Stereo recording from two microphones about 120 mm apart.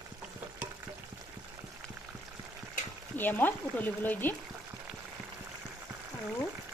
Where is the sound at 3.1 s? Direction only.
15° left (ahead or behind).